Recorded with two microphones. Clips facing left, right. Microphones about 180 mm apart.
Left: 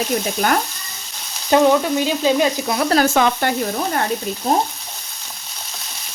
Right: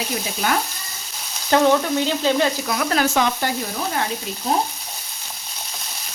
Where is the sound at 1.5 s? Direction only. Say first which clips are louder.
Left 2 dB; 15° left (ahead or behind).